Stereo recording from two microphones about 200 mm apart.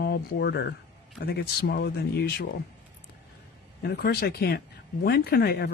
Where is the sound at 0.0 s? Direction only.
55° left (ahead or behind).